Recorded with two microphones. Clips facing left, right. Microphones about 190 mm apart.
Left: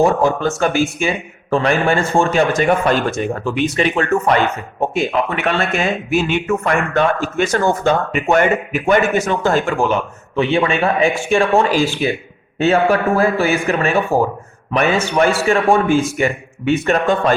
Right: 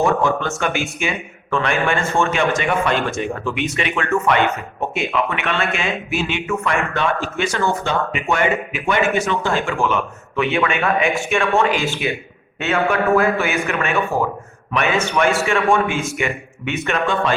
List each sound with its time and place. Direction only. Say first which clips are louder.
0.0 s a man's voice: left 4 dB; 35° left (ahead or behind)